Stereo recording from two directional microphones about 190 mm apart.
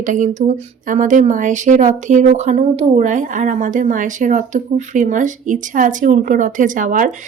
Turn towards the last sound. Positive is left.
turn(degrees=-45)  # may be behind; listen again after turning